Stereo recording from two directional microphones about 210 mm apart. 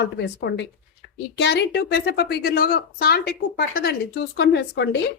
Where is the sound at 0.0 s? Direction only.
55° left (ahead or behind).